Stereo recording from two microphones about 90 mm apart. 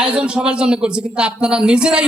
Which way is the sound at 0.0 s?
10° right (ahead or behind).